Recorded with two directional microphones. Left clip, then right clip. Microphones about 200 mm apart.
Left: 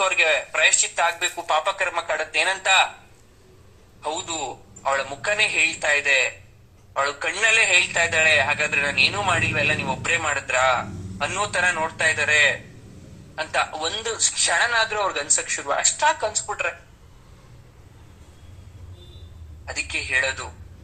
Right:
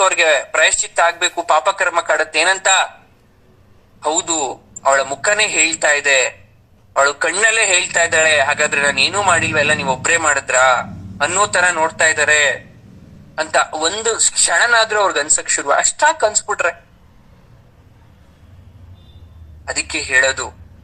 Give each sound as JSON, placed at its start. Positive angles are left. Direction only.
{"t": 0.0, "sound": "a man's voice", "side_deg": -30}
{"t": 4.0, "sound": "a man's voice", "side_deg": -30}
{"t": 19.6, "sound": "a man's voice", "side_deg": -30}